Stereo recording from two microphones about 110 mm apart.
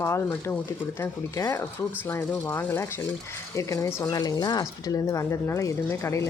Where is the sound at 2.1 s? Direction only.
20° left (ahead or behind).